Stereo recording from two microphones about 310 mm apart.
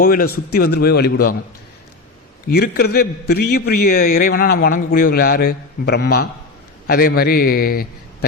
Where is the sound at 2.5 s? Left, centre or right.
Left.